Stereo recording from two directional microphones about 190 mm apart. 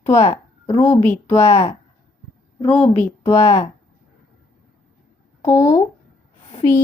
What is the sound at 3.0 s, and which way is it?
Speech, 15° left (ahead or behind).